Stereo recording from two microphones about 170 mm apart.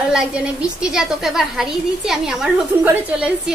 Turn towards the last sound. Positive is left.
turn(degrees=-10)  # may be behind; listen again after turning